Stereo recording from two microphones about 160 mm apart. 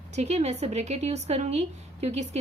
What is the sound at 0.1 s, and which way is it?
Speech, 45° right (ahead or behind).